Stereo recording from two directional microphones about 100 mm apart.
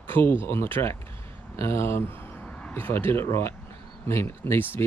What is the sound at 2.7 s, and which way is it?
Speech, 20° left (ahead or behind).